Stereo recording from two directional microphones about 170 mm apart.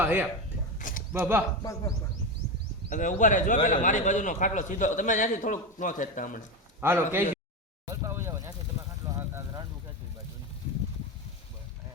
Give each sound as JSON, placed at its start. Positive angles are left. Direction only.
{"t": 0.0, "sound": "a man's voice", "side_deg": -10}
{"t": 0.8, "sound": "a sound", "side_deg": 50}
{"t": 1.2, "sound": "a man's voice", "side_deg": -15}
{"t": 2.9, "sound": "speech", "side_deg": 50}
{"t": 6.8, "sound": "a man's voice", "side_deg": -15}
{"t": 7.9, "sound": "a sound", "side_deg": -15}